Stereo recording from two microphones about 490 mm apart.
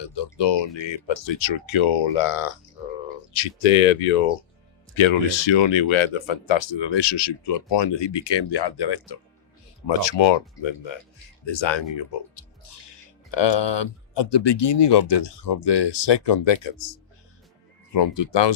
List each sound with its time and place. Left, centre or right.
0.0 s speech: left
4.9 s speech: left
17.9 s speech: left